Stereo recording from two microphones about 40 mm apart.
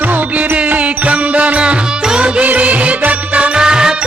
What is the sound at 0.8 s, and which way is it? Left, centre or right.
Music, right.